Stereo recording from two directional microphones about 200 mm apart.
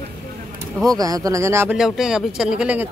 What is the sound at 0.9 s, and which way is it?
Speech, 20° right (ahead or behind).